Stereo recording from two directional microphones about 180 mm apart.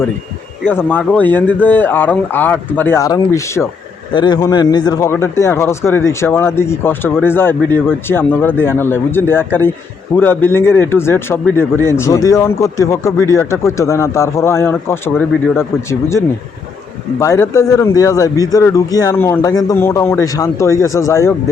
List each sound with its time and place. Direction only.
0.6 s speech: 10° left (ahead or behind)